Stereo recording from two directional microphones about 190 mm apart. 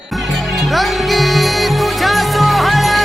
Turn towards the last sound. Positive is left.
turn(degrees=0)  # may be behind; listen again after turning